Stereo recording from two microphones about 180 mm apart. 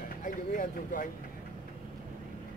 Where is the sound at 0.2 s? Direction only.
50° left (ahead or behind).